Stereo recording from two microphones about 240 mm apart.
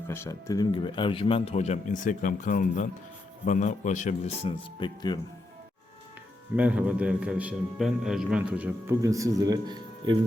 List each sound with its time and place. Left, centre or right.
0.1 s a man's voice: centre; by 4.5 s left
4.8 s speech: centre
6.6 s a man's voice: centre